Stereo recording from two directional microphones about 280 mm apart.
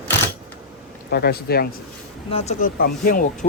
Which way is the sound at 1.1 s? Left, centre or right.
Left.